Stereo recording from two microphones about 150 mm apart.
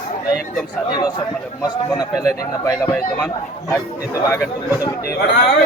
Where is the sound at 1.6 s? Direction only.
25° left (ahead or behind).